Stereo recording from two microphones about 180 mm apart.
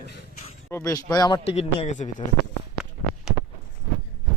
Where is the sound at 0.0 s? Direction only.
65° left (ahead or behind).